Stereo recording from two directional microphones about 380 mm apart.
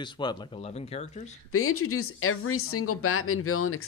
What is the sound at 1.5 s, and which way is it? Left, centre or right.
Speech, left.